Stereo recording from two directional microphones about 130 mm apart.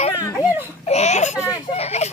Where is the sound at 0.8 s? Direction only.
55° left (ahead or behind).